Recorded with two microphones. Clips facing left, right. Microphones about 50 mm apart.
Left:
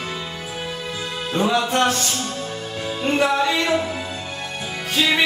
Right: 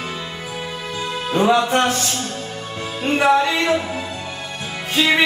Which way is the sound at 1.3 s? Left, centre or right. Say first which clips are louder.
Right 4 dB; centre.